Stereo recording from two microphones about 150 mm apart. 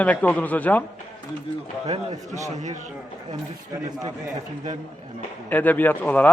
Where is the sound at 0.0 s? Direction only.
10° left (ahead or behind).